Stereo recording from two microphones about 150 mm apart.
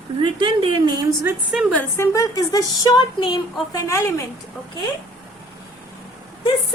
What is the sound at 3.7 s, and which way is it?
Speech, 20° left (ahead or behind).